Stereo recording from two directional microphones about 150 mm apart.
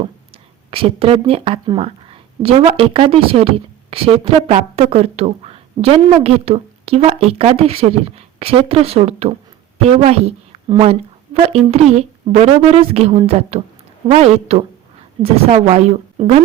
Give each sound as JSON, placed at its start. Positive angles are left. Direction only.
{"t": 0.7, "sound": "a woman's voice", "side_deg": -40}